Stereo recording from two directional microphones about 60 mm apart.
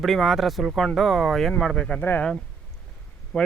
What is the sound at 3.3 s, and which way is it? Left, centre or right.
Speech, centre.